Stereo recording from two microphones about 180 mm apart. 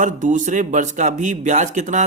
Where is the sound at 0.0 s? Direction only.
45° right (ahead or behind).